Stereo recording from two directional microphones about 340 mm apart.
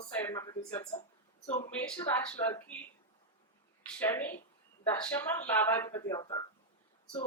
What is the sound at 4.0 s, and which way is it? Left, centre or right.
Speech, centre.